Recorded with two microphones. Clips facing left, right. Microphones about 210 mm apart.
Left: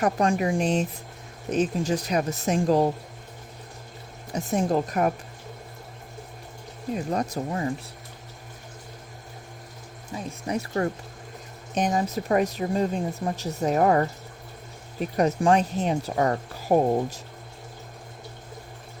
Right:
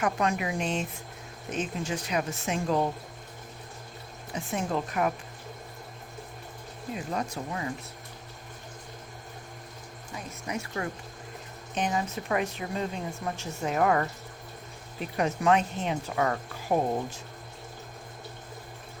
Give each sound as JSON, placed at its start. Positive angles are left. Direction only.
{"t": 0.0, "sound": "speech", "side_deg": 35}
{"t": 4.3, "sound": "speech", "side_deg": 40}
{"t": 6.9, "sound": "speech", "side_deg": 40}
{"t": 10.1, "sound": "speech", "side_deg": 30}